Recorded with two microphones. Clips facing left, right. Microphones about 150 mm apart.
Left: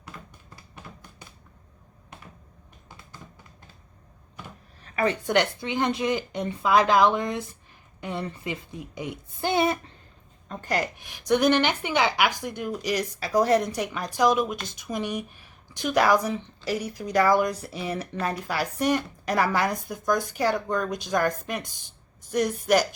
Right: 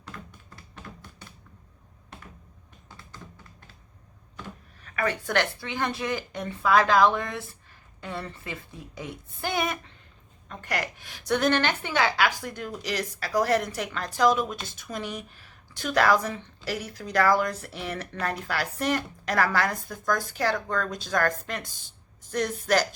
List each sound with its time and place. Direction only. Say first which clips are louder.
4.8 s a woman's voice: left 3 dB; 30° left (ahead or behind)